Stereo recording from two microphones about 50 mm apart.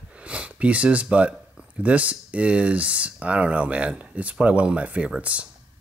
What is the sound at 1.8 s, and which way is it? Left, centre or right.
Speech, right.